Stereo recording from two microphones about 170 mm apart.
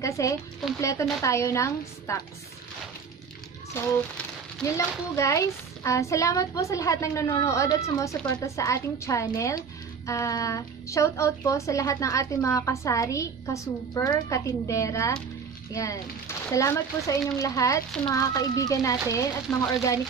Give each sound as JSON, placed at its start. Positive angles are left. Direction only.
{"t": 0.0, "sound": "speech", "side_deg": 20}
{"t": 3.8, "sound": "speech", "side_deg": 15}
{"t": 19.5, "sound": "speech", "side_deg": 5}